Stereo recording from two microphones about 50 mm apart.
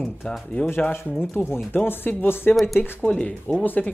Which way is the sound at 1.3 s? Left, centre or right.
Left.